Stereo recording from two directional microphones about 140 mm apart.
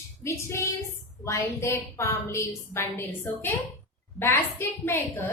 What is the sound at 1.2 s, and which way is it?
A woman's voice, 20° left (ahead or behind).